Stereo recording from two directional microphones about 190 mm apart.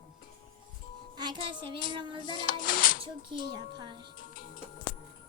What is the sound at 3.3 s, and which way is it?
Speech, 25° right (ahead or behind).